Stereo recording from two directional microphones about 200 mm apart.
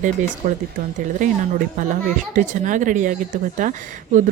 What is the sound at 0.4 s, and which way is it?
Speech, 40° right (ahead or behind).